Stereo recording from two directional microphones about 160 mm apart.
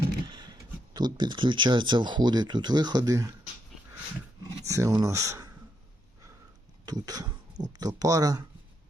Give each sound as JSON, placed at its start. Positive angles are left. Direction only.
{"t": 0.3, "sound": "a sound", "side_deg": -25}
{"t": 0.9, "sound": "speech", "side_deg": -30}
{"t": 4.6, "sound": "speech", "side_deg": -20}
{"t": 6.8, "sound": "speech", "side_deg": -25}